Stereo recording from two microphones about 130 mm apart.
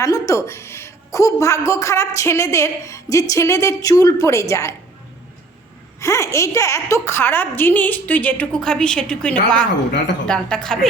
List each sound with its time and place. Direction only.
0.0 s a woman's voice: 25° left (ahead or behind)
6.0 s a woman's voice: 20° left (ahead or behind); by 10.8 s 5° left (ahead or behind)